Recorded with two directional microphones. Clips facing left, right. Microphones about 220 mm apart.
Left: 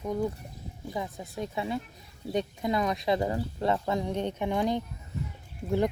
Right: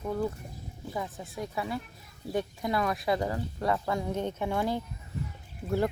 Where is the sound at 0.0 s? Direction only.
15° left (ahead or behind).